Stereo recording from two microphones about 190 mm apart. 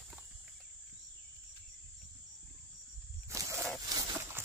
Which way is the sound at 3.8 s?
20° right (ahead or behind).